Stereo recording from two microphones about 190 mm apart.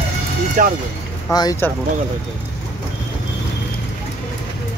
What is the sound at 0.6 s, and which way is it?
Speech, 45° right (ahead or behind).